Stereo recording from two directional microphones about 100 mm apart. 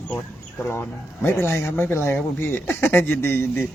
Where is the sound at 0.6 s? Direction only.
20° left (ahead or behind).